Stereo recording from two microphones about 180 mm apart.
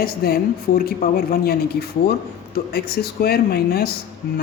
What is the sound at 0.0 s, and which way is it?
A woman's voice, 60° left (ahead or behind).